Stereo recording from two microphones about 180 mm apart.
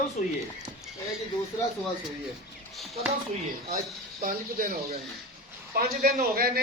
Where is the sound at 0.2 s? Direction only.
40° left (ahead or behind).